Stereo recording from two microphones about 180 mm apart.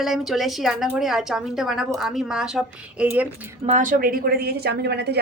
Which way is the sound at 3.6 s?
45° right (ahead or behind).